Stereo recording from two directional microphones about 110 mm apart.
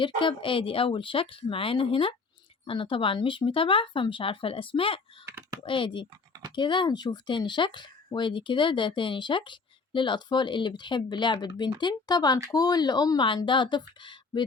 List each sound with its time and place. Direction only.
0.0 s speech: 50° left (ahead or behind)
5.2 s computer keyboard: 20° right (ahead or behind)
5.6 s speech: 50° left (ahead or behind)